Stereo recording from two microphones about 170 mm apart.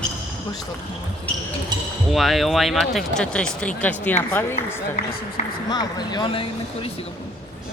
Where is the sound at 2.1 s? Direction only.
Centre (ahead or behind); by 6.9 s 30° left (ahead or behind).